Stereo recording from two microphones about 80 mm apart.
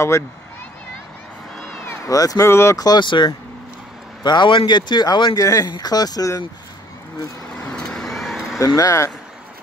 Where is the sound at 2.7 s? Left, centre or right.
Left.